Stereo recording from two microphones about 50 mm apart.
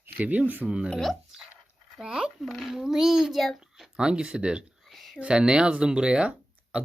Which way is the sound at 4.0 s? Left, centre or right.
Centre.